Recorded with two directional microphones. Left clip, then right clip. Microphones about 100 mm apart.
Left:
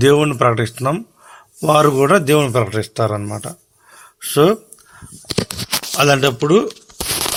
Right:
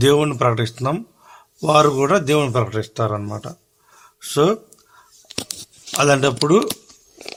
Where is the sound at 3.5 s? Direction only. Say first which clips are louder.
Left 4 dB; 40° left (ahead or behind).